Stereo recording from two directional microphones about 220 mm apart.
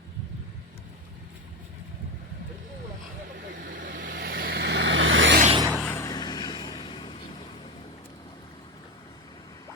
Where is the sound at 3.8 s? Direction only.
40° right (ahead or behind); by 5.4 s 60° right (ahead or behind).